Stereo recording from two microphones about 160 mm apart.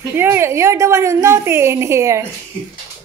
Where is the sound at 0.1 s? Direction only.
15° right (ahead or behind).